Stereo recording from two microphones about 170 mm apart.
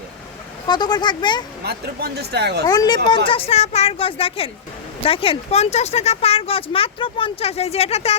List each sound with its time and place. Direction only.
0.7 s speech: 25° left (ahead or behind)
1.6 s speech: 70° right (ahead or behind)
2.6 s speech: 25° left (ahead or behind)
3.2 s speech: 35° left (ahead or behind)